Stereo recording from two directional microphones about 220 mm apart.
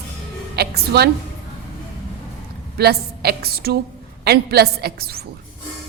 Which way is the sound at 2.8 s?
45° right (ahead or behind).